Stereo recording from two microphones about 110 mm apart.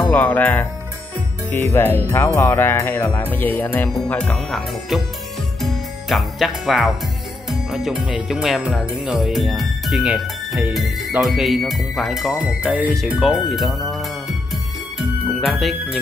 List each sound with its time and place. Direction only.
0.1 s music: 15° left (ahead or behind)
1.6 s speech: 20° left (ahead or behind)
3.1 s music: 15° left (ahead or behind)
4.1 s speech: 5° left (ahead or behind)
5.6 s music: centre (ahead or behind)
7.5 s speech: 5° right (ahead or behind)
15.0 s music: centre (ahead or behind)